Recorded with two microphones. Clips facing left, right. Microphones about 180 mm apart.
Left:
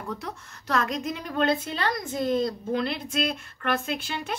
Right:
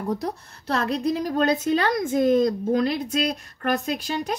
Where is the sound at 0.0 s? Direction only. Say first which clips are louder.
Right 8 dB; 40° right (ahead or behind).